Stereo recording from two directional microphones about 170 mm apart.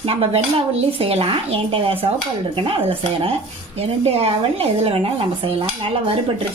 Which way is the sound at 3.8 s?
35° right (ahead or behind).